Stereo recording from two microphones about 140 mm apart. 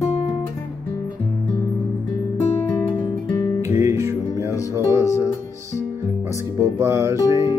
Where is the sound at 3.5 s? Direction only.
20° right (ahead or behind).